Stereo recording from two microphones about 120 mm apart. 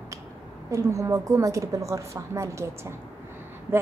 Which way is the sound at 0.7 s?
25° right (ahead or behind).